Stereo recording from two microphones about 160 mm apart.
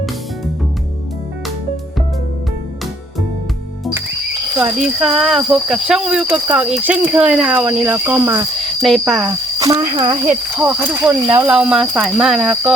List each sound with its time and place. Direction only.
4.5 s speech: 10° right (ahead or behind)
8.8 s speech: centre (ahead or behind)
9.2 s cricket: 20° right (ahead or behind)
9.9 s speech: 30° right (ahead or behind)
10.2 s speech: 15° right (ahead or behind)